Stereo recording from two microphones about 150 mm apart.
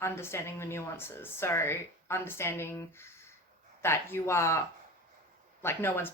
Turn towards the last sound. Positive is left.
turn(degrees=15)  # may be behind; listen again after turning